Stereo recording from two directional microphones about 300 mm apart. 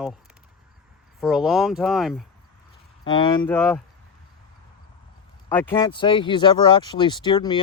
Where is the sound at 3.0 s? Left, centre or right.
Centre.